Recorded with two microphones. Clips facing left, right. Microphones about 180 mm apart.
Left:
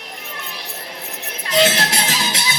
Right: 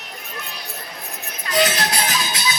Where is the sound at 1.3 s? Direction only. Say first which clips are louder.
Left 3 dB; 25° left (ahead or behind).